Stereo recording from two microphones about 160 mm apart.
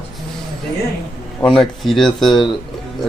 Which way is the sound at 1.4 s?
Centre (ahead or behind).